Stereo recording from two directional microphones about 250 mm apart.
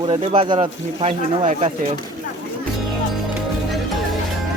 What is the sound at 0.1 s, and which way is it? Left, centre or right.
Speech, centre.